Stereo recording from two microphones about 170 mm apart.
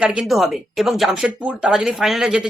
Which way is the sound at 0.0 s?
5° right (ahead or behind).